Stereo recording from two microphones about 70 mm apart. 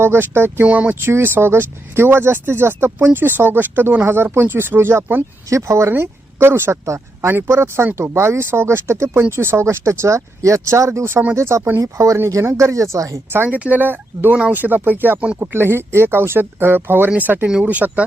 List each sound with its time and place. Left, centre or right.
0.0 s speech: right
0.6 s speech: centre
0.9 s speech: right
5.5 s speech: right
13.3 s speech: right